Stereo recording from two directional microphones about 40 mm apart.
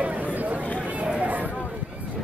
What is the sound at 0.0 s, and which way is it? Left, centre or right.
Chatter, right.